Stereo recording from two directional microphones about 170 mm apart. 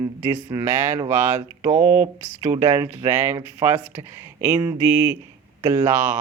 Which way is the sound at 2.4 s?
15° right (ahead or behind).